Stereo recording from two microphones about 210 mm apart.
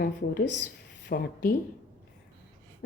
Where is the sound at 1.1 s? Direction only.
45° left (ahead or behind).